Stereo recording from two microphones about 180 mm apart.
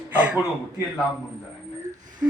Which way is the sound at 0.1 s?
10° right (ahead or behind).